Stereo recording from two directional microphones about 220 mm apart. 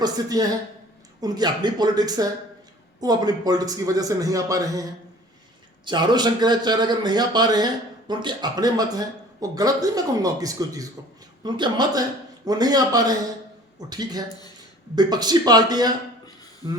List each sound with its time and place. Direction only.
0.0 s a man's voice: 15° right (ahead or behind)